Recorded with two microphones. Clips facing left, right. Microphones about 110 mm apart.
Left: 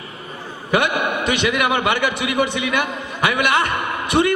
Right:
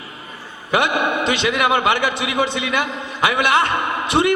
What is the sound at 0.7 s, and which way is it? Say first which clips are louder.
A man's voice: right 1 dB; 20° right (ahead or behind).